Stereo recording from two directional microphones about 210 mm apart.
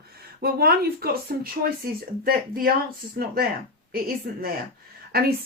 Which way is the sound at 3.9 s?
45° right (ahead or behind).